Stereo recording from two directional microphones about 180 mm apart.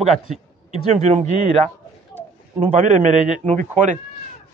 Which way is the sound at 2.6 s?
40° right (ahead or behind).